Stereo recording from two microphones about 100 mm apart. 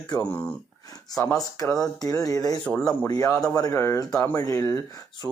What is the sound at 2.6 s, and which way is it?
Speech, 10° left (ahead or behind).